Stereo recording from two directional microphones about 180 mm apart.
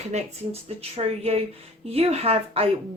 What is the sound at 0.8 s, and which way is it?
Speech, 35° right (ahead or behind).